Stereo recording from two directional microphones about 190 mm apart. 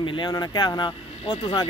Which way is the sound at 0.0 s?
25° left (ahead or behind).